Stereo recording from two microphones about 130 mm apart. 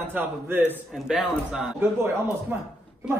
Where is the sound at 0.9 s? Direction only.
Centre (ahead or behind).